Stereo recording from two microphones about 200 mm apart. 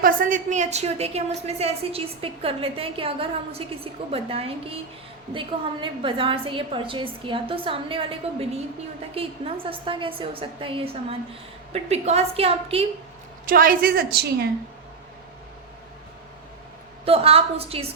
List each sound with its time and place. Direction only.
0.0 s a woman's voice: 40° right (ahead or behind)
13.5 s a woman's voice: 45° right (ahead or behind)
17.1 s a woman's voice: 30° right (ahead or behind)